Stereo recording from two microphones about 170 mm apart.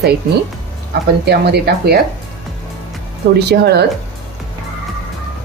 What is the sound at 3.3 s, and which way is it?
Speech, 75° right (ahead or behind).